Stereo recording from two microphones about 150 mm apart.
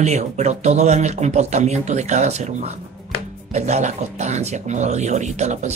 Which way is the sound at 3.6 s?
50° right (ahead or behind).